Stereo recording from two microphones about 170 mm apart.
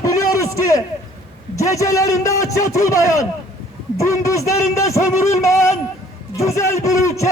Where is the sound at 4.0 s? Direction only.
20° left (ahead or behind).